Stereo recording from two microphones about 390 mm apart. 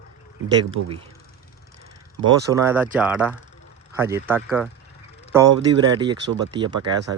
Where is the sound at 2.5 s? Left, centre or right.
Centre.